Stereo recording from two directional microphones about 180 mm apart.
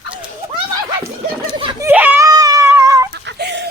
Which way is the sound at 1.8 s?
10° right (ahead or behind).